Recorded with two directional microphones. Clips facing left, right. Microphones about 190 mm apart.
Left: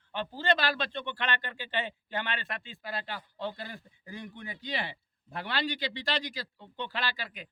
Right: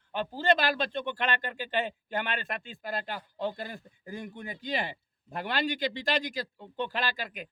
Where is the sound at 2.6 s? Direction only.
50° right (ahead or behind).